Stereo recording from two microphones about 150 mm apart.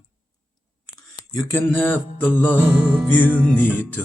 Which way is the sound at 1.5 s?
15° left (ahead or behind).